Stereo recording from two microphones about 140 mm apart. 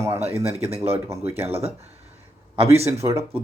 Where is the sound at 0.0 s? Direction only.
20° right (ahead or behind).